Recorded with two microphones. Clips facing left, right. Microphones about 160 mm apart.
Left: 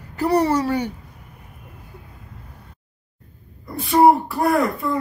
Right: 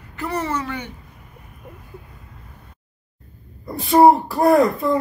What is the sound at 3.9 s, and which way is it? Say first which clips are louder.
Speech: right 2 dB; 40° right (ahead or behind).